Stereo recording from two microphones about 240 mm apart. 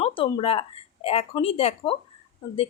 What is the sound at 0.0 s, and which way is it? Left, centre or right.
A woman's voice, left.